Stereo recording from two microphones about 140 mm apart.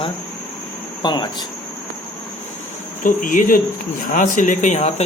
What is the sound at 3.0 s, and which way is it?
Insect, 70° left (ahead or behind).